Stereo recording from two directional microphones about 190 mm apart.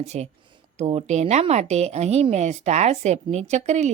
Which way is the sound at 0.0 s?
35° right (ahead or behind).